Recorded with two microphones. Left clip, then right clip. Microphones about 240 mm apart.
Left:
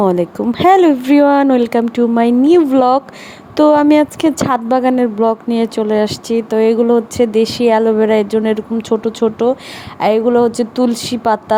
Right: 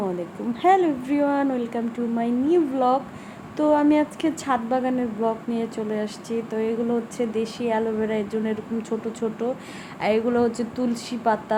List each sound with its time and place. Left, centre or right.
0.5 s a woman's voice: left